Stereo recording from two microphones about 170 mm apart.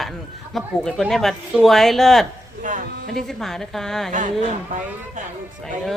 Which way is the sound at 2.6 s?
45° right (ahead or behind).